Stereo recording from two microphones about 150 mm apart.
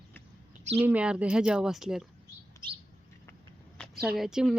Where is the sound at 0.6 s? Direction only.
45° right (ahead or behind).